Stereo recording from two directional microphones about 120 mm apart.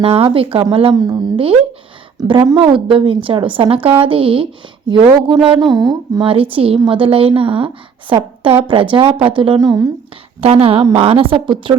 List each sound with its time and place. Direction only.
0.0 s speech: 50° right (ahead or behind)
0.9 s a man's voice: 30° right (ahead or behind)
2.2 s a man's voice: 45° right (ahead or behind)
6.2 s speech: 50° right (ahead or behind)
9.6 s speech: 30° right (ahead or behind)
10.4 s speech: 55° right (ahead or behind)